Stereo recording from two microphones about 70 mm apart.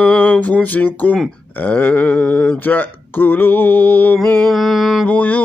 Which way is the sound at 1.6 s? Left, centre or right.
Left.